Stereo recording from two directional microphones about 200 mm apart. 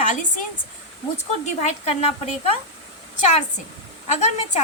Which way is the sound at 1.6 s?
30° left (ahead or behind).